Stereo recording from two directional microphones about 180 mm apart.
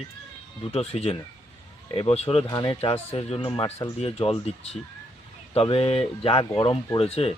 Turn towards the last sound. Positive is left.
turn(degrees=35)  # may be behind; listen again after turning